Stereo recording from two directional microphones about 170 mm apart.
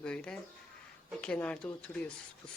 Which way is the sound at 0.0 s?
5° left (ahead or behind).